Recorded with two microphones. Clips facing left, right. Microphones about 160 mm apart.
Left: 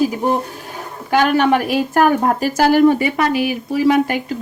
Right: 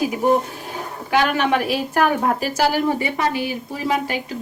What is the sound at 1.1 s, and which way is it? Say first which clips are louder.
A woman's voice: left 4 dB; 45° left (ahead or behind).